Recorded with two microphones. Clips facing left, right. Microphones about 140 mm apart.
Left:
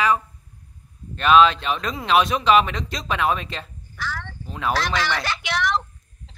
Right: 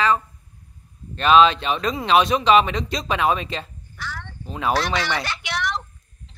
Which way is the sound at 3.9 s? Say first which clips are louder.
Left 3 dB; 90° left.